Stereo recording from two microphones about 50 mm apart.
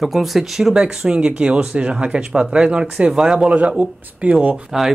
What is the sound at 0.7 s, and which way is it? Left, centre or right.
Speech, centre.